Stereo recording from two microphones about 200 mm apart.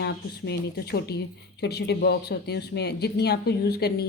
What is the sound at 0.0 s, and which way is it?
Speech, 55° left (ahead or behind).